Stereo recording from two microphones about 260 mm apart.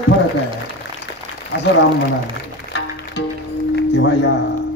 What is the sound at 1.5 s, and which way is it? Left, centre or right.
Speech, left.